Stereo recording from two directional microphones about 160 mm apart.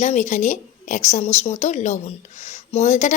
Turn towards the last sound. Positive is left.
turn(degrees=45)  # may be behind; listen again after turning